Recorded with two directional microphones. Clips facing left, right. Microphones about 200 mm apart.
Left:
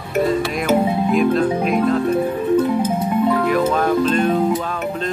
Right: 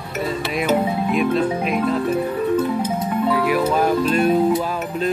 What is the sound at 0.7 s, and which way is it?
Music, 5° left (ahead or behind).